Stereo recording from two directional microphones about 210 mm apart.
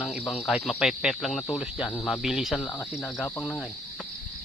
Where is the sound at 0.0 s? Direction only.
Centre (ahead or behind).